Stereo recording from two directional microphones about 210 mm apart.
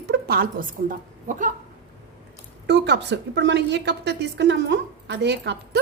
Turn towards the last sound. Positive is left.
turn(degrees=-55)  # may be behind; listen again after turning